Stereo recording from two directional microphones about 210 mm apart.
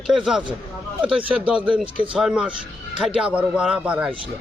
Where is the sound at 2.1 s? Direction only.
5° right (ahead or behind).